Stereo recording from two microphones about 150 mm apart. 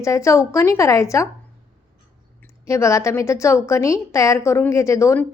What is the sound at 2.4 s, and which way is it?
A woman's voice, 20° left (ahead or behind).